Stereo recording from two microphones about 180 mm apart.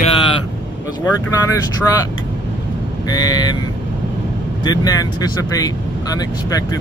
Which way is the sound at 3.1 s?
20° left (ahead or behind).